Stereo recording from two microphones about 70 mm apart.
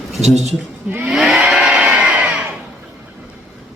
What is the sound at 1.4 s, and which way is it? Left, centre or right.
Music, centre.